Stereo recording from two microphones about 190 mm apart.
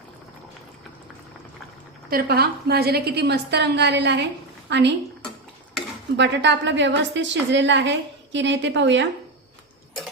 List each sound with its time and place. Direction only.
2.0 s a woman's voice: 55° right (ahead or behind)
6.1 s a woman's voice: 65° right (ahead or behind)